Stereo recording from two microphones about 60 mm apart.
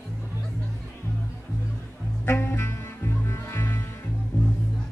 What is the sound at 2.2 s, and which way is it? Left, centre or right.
Music, left.